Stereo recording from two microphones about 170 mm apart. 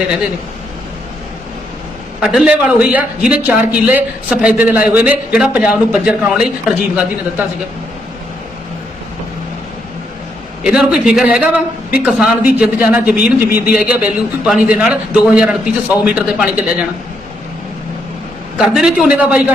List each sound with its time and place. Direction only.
2.2 s a man's voice: 5° right (ahead or behind)
10.6 s a man's voice: 5° right (ahead or behind)
18.5 s speech: 5° right (ahead or behind)